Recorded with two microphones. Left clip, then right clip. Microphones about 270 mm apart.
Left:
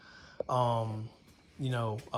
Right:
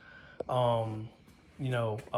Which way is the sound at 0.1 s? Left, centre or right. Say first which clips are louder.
Left 1 dB; centre.